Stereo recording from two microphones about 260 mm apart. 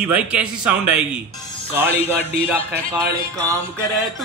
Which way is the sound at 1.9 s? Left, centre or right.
Right.